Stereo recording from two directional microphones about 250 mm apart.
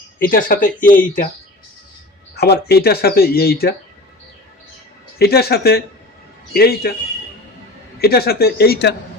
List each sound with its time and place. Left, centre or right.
0.2 s speech: left
2.3 s speech: left
5.2 s speech: left
8.0 s speech: left